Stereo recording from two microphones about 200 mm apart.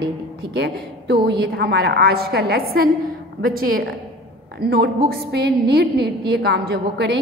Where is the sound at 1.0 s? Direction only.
55° right (ahead or behind).